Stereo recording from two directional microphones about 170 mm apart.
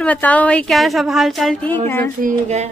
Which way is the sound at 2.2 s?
40° right (ahead or behind).